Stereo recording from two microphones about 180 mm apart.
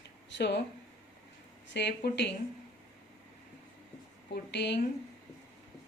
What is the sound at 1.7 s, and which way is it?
Speech, 70° left (ahead or behind).